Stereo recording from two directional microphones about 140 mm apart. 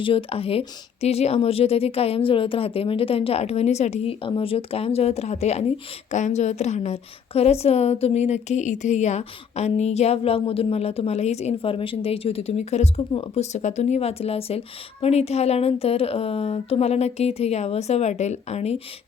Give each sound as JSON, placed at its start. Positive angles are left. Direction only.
{"t": 0.0, "sound": "speech", "side_deg": 40}